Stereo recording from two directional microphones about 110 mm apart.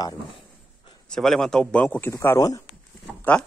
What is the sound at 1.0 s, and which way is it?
Speech, 5° left (ahead or behind).